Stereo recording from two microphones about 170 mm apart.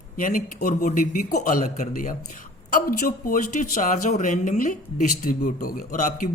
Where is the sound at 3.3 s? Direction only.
50° left (ahead or behind).